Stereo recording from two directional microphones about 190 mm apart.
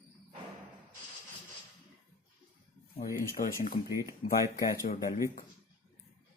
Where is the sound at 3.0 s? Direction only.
45° left (ahead or behind).